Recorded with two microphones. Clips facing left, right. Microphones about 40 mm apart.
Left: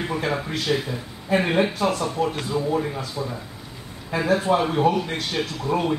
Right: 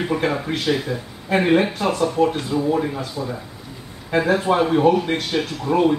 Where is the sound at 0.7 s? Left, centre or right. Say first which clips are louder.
Right 1 dB; centre.